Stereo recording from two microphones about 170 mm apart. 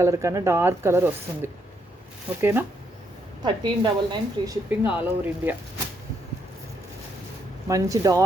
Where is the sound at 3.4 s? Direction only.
25° right (ahead or behind).